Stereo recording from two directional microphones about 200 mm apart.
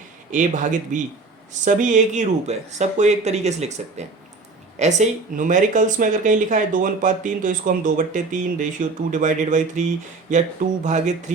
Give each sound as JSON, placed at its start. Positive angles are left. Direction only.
{"t": 0.3, "sound": "speech", "side_deg": -40}